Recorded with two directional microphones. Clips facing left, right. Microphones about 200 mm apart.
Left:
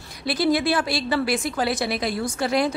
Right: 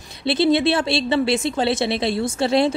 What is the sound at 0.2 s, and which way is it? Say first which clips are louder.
A woman's voice: right 4 dB; 25° right (ahead or behind).